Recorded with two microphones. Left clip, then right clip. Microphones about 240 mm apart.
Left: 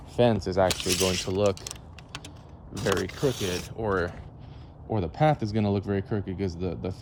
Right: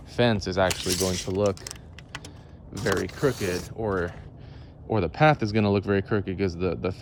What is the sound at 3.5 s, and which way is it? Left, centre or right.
Speech, left.